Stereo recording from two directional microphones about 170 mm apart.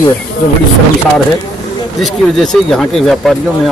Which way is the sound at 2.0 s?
Centre (ahead or behind).